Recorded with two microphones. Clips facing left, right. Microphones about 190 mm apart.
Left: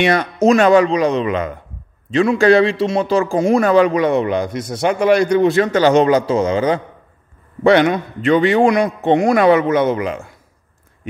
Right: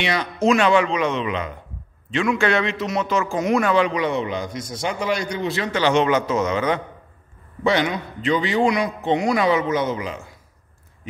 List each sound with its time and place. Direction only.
0.0 s a man's voice: 50° left (ahead or behind); by 6.8 s 30° left (ahead or behind)
7.6 s a man's voice: 55° left (ahead or behind)